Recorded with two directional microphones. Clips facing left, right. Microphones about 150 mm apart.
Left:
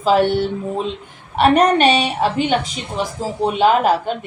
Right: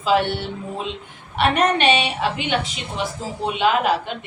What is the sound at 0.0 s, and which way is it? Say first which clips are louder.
A woman's voice: left 5 dB; 40° left (ahead or behind).